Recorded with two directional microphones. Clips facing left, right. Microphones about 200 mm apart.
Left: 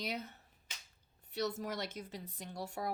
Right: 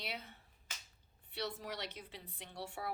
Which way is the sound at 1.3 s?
45° left (ahead or behind).